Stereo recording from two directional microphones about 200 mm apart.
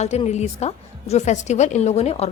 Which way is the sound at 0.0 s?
35° left (ahead or behind).